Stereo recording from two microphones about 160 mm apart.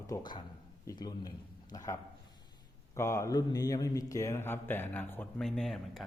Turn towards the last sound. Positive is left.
turn(degrees=0)  # may be behind; listen again after turning